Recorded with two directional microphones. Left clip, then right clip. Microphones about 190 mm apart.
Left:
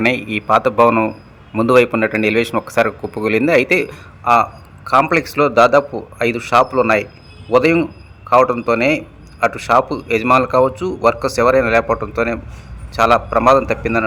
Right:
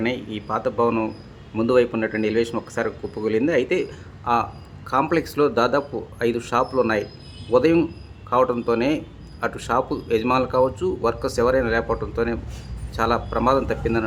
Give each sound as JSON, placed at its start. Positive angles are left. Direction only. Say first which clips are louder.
{"t": 0.0, "sound": "a man's voice", "louder": "left 9 dB", "side_deg": 25}